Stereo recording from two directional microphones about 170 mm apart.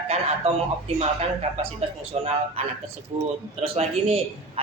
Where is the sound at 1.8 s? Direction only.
35° right (ahead or behind).